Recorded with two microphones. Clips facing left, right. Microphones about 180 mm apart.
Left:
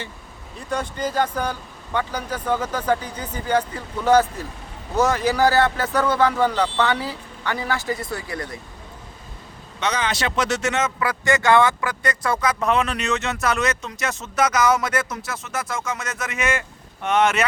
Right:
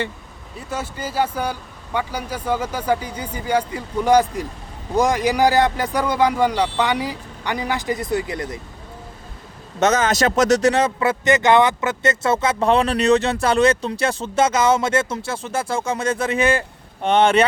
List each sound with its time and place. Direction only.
0.7 s speech: 5° right (ahead or behind)
9.8 s speech: 45° right (ahead or behind)